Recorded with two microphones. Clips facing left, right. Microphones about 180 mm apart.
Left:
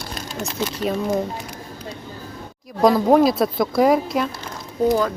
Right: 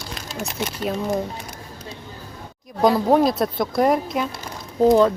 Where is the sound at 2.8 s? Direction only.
Centre (ahead or behind).